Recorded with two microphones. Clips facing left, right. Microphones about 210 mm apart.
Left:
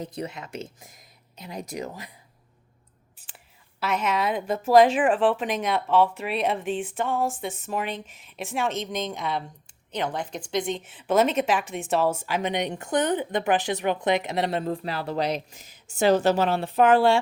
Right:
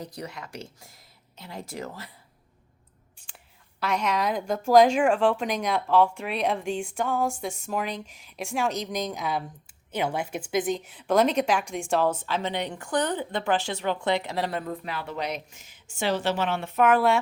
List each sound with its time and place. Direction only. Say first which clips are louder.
0.0 s speech: left 4 dB; 25° left (ahead or behind)
3.2 s speech: left 1 dB; 5° left (ahead or behind); by 17.2 s 30° left (ahead or behind)